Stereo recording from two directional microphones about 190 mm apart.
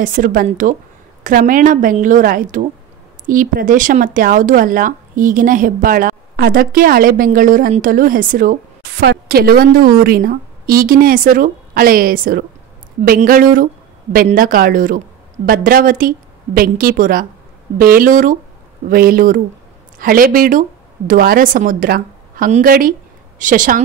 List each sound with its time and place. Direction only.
0.0 s speech: 45° right (ahead or behind)